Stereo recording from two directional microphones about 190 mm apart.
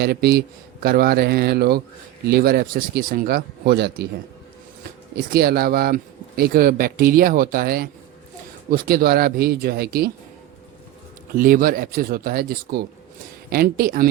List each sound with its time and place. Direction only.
0.0 s speech: 55° right (ahead or behind)
5.1 s speech: 50° right (ahead or behind)
11.3 s speech: 45° right (ahead or behind)